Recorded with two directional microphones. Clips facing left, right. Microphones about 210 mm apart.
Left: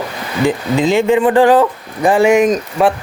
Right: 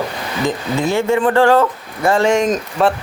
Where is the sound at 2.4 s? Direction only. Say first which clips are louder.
Left 3 dB; 5° left (ahead or behind).